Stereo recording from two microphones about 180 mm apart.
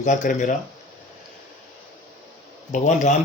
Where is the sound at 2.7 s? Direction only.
45° left (ahead or behind).